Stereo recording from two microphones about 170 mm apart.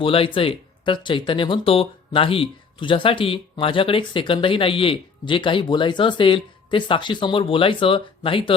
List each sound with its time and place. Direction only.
0.0 s speech: 30° left (ahead or behind)